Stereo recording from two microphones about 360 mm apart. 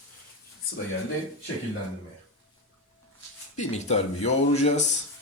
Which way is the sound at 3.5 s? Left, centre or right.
Centre.